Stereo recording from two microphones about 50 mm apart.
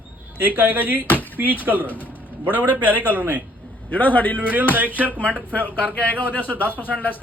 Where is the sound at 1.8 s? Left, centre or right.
Left.